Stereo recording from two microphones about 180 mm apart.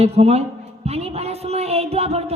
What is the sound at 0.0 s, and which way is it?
A woman's voice, 35° right (ahead or behind).